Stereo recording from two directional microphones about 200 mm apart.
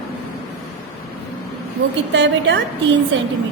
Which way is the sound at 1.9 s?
65° right (ahead or behind).